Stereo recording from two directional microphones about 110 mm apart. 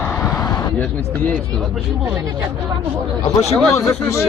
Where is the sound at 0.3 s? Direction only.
35° left (ahead or behind).